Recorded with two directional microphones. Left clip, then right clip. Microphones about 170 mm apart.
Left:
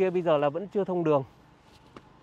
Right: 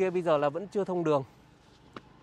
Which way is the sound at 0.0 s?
35° left (ahead or behind).